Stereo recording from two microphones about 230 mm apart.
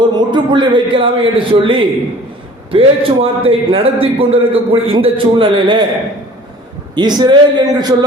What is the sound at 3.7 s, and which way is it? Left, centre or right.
A man's voice, right.